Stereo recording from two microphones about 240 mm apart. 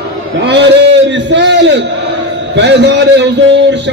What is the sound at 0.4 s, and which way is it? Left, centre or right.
A man's voice, right.